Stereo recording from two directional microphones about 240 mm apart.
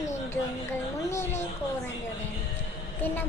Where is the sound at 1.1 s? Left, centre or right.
Centre.